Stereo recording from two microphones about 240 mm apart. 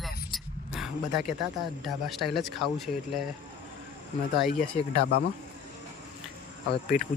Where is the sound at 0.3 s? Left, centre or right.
Centre.